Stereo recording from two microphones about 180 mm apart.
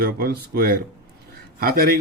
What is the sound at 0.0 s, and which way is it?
Speech, 55° right (ahead or behind).